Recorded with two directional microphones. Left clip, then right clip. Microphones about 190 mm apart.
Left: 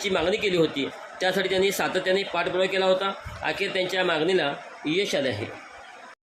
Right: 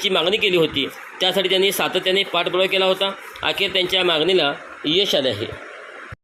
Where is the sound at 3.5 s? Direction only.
25° left (ahead or behind).